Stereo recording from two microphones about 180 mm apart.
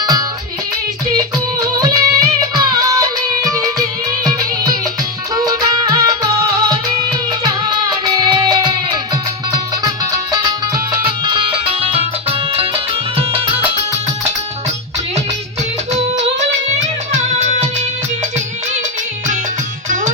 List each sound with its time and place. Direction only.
0.0 s music: 20° right (ahead or behind)
1.6 s music: 20° right (ahead or behind)
7.4 s music: 20° right (ahead or behind)
13.1 s music: 30° right (ahead or behind)
15.9 s music: 40° right (ahead or behind)